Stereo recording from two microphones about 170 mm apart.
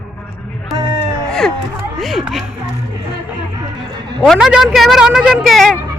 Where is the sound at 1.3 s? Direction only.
Centre (ahead or behind).